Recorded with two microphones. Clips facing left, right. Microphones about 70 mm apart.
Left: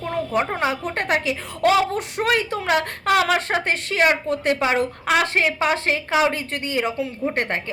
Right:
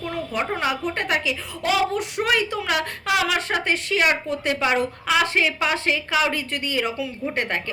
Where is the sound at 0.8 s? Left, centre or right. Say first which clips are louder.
Left 1 dB; left.